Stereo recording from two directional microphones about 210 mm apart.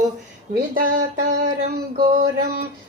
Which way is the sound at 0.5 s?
40° right (ahead or behind).